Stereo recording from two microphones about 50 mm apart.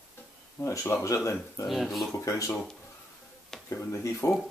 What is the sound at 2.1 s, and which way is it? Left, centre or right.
Speech, left.